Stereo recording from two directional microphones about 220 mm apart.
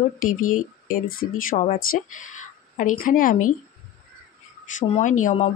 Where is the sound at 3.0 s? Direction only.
40° left (ahead or behind).